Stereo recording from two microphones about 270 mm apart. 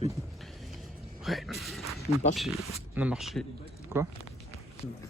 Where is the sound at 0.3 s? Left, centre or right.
Centre.